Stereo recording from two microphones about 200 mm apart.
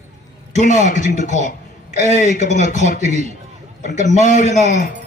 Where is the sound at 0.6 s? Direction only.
35° left (ahead or behind).